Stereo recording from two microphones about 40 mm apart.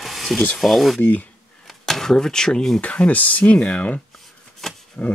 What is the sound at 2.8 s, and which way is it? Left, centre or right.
Speech, left.